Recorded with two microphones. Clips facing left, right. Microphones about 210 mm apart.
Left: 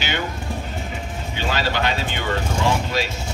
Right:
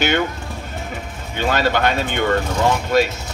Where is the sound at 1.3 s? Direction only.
55° right (ahead or behind).